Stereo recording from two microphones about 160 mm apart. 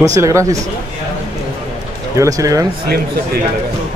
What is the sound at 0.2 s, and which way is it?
Speech, 20° right (ahead or behind).